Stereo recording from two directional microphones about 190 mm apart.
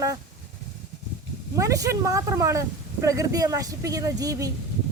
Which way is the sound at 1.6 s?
15° right (ahead or behind).